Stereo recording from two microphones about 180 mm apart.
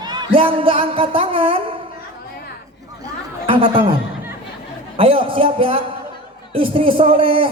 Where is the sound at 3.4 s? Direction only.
30° right (ahead or behind).